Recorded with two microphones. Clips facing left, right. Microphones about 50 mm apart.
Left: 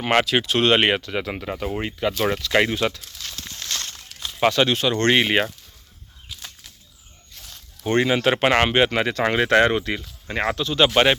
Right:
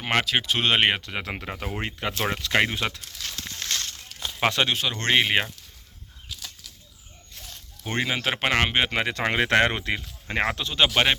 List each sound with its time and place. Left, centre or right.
0.0 s speech: centre
0.4 s speech: centre
1.2 s speech: right
2.5 s speech: centre
4.4 s speech: centre
4.7 s speech: centre
7.4 s snake: centre
8.0 s speech: centre
8.7 s speech: centre
9.6 s speech: right
10.8 s speech: centre